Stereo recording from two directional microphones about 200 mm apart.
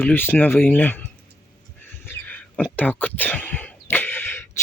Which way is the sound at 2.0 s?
10° left (ahead or behind).